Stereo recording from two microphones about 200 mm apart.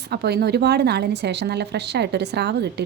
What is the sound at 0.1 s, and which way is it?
A woman's voice, 55° right (ahead or behind).